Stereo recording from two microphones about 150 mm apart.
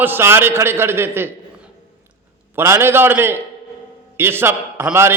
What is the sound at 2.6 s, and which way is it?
A man's voice, 15° right (ahead or behind).